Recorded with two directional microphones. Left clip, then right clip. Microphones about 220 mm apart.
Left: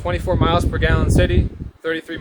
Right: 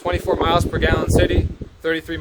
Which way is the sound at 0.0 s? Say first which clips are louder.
Right 1 dB; 20° right (ahead or behind).